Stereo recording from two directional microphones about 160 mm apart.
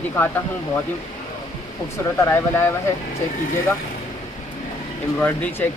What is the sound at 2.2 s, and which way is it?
Speech, 15° left (ahead or behind).